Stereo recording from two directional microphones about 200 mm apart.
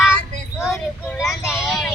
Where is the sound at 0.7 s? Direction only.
15° left (ahead or behind).